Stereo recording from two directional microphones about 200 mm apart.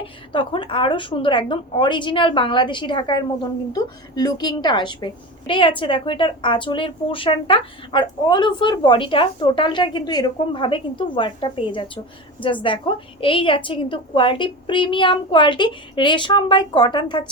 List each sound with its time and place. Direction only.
0.0 s a woman's voice: 25° left (ahead or behind)